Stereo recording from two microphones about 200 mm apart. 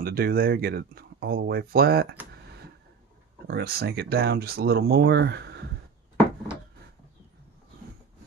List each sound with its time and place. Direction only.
0.0 s speech: 50° right (ahead or behind)
3.4 s speech: 55° right (ahead or behind)
6.1 s a sound: 15° left (ahead or behind)